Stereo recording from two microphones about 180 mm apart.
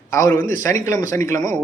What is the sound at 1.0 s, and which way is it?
Speech, 45° right (ahead or behind).